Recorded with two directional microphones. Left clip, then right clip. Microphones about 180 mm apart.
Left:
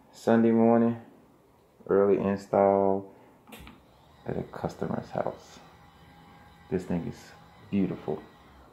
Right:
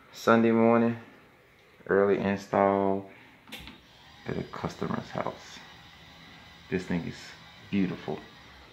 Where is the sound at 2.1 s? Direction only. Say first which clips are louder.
Left 2 dB; 20° left (ahead or behind).